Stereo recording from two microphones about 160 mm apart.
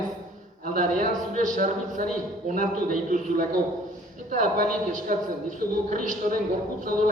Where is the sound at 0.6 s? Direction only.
60° right (ahead or behind).